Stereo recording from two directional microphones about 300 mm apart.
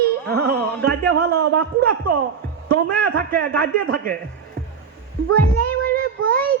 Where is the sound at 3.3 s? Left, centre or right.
Right.